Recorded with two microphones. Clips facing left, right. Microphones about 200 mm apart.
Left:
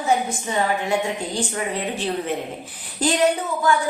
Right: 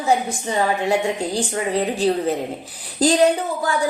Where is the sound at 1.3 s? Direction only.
35° right (ahead or behind).